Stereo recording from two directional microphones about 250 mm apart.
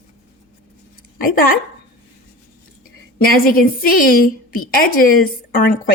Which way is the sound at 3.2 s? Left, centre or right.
Left.